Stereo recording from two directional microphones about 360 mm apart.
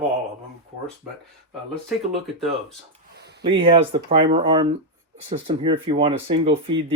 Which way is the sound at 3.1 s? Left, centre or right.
Right.